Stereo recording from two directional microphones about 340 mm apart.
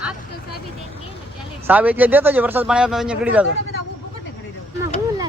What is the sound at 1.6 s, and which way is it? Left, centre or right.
Speech, centre.